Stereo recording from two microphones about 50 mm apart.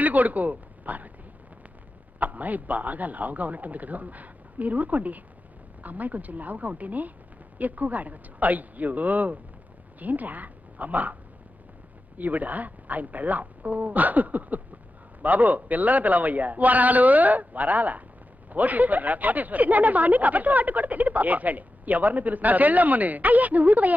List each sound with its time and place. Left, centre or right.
0.0 s speech: right
2.1 s a woman's voice: right
12.2 s speech: right